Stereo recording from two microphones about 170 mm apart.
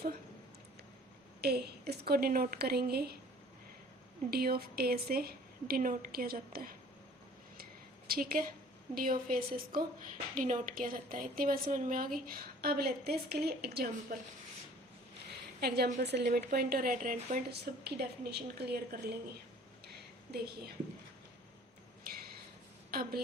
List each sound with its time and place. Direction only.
1.4 s a woman's voice: 70° right (ahead or behind)
4.3 s a woman's voice: 65° right (ahead or behind)
7.6 s a sound: 60° right (ahead or behind)
9.3 s a woman's voice: 55° right (ahead or behind)
15.6 s a woman's voice: 70° right (ahead or behind)
16.0 s a woman's voice: 80° right
20.3 s a woman's voice: 70° right (ahead or behind)
22.9 s a woman's voice: 60° right (ahead or behind)